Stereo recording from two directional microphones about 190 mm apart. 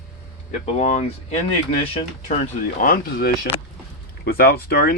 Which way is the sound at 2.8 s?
50° left (ahead or behind).